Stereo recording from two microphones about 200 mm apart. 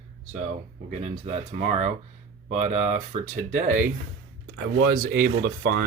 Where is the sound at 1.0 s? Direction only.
35° right (ahead or behind).